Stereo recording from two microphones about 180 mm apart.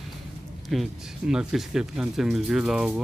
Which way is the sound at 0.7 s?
Centre (ahead or behind).